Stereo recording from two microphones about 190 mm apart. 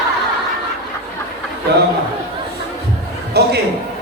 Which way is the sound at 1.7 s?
60° right (ahead or behind).